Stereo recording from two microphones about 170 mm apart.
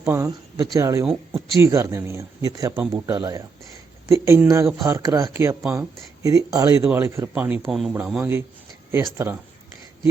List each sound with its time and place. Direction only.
0.0 s speech: 15° right (ahead or behind)
2.7 s speech: 10° right (ahead or behind)
3.1 s speech: 20° right (ahead or behind)